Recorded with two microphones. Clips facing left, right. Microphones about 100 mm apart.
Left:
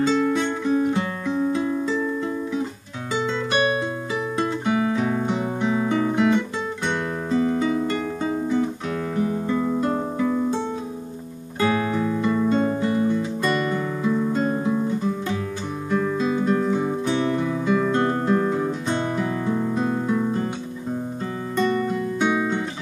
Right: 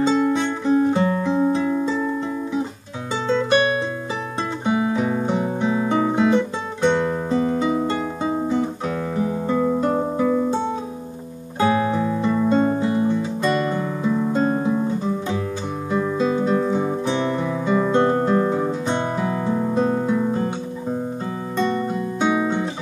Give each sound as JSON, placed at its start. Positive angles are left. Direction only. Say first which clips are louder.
{"t": 0.0, "sound": "music", "louder": "right 2 dB", "side_deg": -10}
{"t": 0.3, "sound": "music", "louder": "right 2 dB", "side_deg": -25}
{"t": 3.4, "sound": "music", "louder": "right 3 dB", "side_deg": -30}
{"t": 4.4, "sound": "guitar", "louder": "right 1 dB", "side_deg": -20}
{"t": 6.8, "sound": "music", "louder": "right 10 dB", "side_deg": -15}
{"t": 9.1, "sound": "music", "louder": "right 1 dB", "side_deg": -15}
{"t": 11.6, "sound": "music", "louder": "right 3 dB", "side_deg": -20}
{"t": 14.3, "sound": "music", "louder": "right 3 dB", "side_deg": -30}
{"t": 14.7, "sound": "guitar", "louder": "right 1 dB", "side_deg": -20}
{"t": 15.9, "sound": "music", "louder": "right 1 dB", "side_deg": -15}
{"t": 16.3, "sound": "music", "louder": "even", "side_deg": -25}
{"t": 16.5, "sound": "music", "louder": "right 2 dB", "side_deg": -15}
{"t": 17.8, "sound": "music", "louder": "right 3 dB", "side_deg": -20}
{"t": 21.5, "sound": "music", "louder": "even", "side_deg": -25}